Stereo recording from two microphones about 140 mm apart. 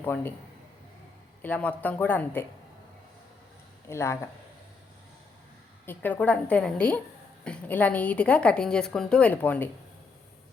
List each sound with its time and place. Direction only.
0.0 s a woman's voice: 15° left (ahead or behind)
1.4 s a woman's voice: 10° left (ahead or behind)
3.8 s speech: 20° left (ahead or behind)
5.8 s a woman's voice: 15° left (ahead or behind)